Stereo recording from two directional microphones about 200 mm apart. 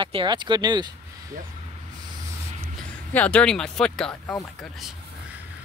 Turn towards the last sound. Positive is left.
turn(degrees=0)  # may be behind; listen again after turning